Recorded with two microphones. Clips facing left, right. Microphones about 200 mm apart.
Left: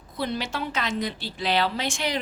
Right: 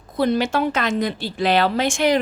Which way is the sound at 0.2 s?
50° right (ahead or behind).